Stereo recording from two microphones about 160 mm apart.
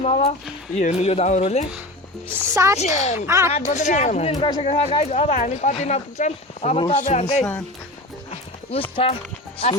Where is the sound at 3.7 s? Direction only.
45° left (ahead or behind).